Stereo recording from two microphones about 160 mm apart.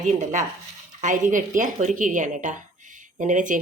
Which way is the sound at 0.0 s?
50° right (ahead or behind).